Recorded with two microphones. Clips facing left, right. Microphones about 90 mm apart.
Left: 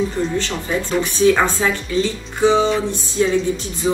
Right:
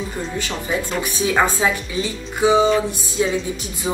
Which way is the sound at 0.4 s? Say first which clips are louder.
Left 2 dB; 10° right (ahead or behind).